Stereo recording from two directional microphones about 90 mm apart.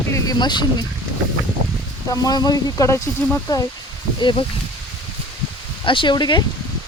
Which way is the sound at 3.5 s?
50° left (ahead or behind).